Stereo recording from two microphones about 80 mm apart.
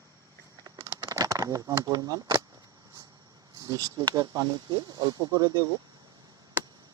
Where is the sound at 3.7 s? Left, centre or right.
Right.